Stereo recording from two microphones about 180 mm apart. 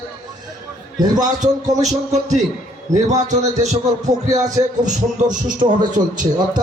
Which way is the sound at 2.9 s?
40° right (ahead or behind).